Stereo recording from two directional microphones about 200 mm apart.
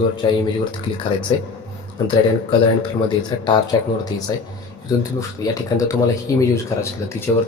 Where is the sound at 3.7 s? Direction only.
20° left (ahead or behind).